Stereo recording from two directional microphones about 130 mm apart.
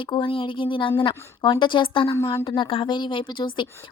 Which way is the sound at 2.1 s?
20° left (ahead or behind).